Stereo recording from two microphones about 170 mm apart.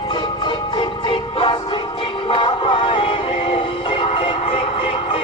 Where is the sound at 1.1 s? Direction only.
30° left (ahead or behind).